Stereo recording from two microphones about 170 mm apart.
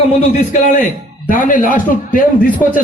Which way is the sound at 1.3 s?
50° left (ahead or behind).